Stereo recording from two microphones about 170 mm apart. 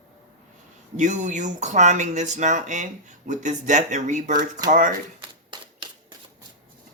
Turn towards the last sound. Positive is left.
turn(degrees=-25)  # may be behind; listen again after turning